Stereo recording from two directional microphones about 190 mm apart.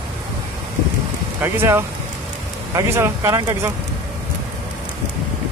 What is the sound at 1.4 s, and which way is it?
Speech, 10° right (ahead or behind).